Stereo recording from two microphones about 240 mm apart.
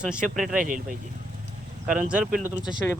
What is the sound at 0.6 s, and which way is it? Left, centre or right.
Speech, right.